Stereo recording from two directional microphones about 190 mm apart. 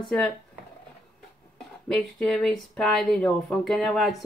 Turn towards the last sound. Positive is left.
turn(degrees=0)  # may be behind; listen again after turning